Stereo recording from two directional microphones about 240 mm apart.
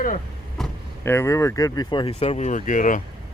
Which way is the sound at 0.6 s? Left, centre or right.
Centre.